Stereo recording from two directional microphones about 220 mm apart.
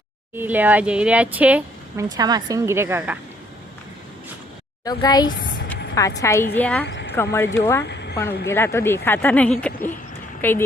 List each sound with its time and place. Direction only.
0.3 s speech: 10° right (ahead or behind)
2.0 s speech: 15° right (ahead or behind)
4.9 s a woman's voice: 15° left (ahead or behind)
6.8 s a sound: 50° left (ahead or behind)
7.2 s speech: 10° left (ahead or behind)
7.9 s a sound: 50° left (ahead or behind)
8.4 s speech: 10° left (ahead or behind)